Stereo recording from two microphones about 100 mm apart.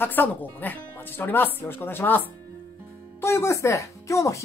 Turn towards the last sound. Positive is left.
turn(degrees=30)  # may be behind; listen again after turning